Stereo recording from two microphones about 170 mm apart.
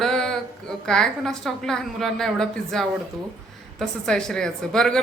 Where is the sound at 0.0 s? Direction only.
5° left (ahead or behind).